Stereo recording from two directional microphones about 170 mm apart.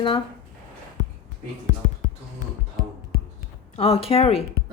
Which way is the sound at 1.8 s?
45° left (ahead or behind).